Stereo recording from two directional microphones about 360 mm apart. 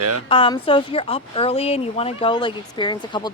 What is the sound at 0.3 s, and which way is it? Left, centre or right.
Speech, centre.